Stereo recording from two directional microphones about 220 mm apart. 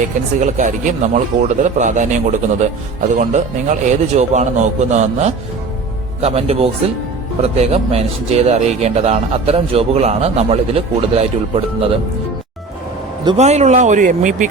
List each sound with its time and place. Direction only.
0.3 s a man's voice: 35° right (ahead or behind)
13.2 s a man's voice: 30° right (ahead or behind)